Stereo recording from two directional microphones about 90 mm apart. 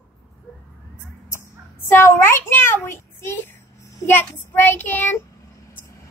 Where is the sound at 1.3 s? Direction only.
25° left (ahead or behind).